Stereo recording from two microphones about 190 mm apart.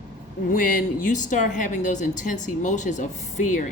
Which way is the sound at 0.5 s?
45° left (ahead or behind).